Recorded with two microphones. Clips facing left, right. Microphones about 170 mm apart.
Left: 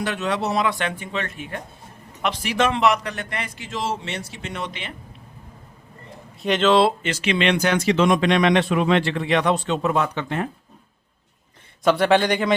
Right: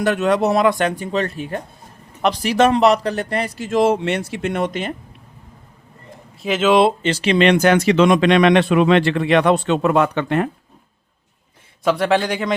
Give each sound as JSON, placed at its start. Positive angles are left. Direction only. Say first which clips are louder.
{"t": 0.0, "sound": "a man's voice", "louder": "right 8 dB", "side_deg": -50}
{"t": 6.4, "sound": "speech", "louder": "right 2 dB", "side_deg": -5}
{"t": 7.1, "sound": "speech", "louder": "right 6 dB", "side_deg": -35}
{"t": 11.8, "sound": "a man's voice", "louder": "even", "side_deg": 0}